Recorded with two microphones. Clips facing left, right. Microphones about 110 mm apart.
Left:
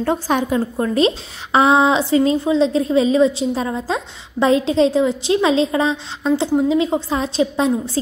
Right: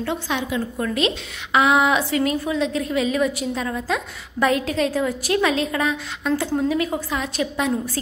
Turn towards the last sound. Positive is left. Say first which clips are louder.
# left 6 dB
turn(degrees=30)  # may be behind; listen again after turning